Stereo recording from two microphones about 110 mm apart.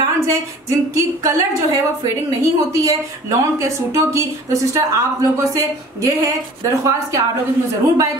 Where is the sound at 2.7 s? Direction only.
30° right (ahead or behind).